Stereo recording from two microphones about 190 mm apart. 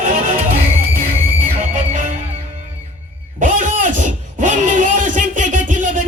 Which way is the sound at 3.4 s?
40° right (ahead or behind).